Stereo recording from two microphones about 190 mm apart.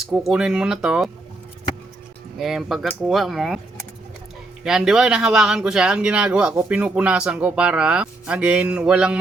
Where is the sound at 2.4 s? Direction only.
Centre (ahead or behind).